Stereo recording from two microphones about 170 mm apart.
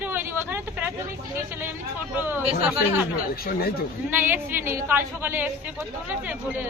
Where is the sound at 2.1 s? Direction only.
10° right (ahead or behind).